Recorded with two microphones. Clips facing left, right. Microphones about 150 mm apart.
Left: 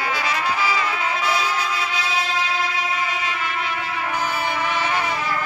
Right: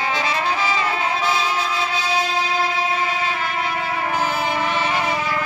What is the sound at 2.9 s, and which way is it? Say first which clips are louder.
Vehicle: right 3 dB; 30° right (ahead or behind).